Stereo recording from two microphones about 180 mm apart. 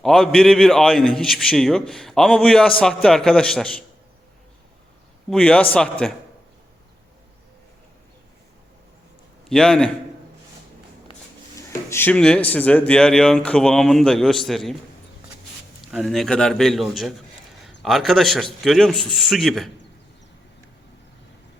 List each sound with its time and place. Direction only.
0.0 s a man's voice: centre (ahead or behind)
5.3 s a man's voice: 5° left (ahead or behind)
9.5 s a man's voice: 5° left (ahead or behind)
11.9 s a man's voice: 10° left (ahead or behind)
15.8 s a man's voice: centre (ahead or behind)